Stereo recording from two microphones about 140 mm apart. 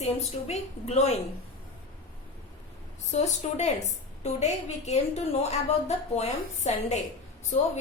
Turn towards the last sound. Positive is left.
turn(degrees=55)  # may be behind; listen again after turning